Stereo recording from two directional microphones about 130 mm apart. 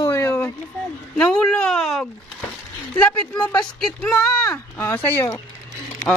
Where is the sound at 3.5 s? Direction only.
5° left (ahead or behind).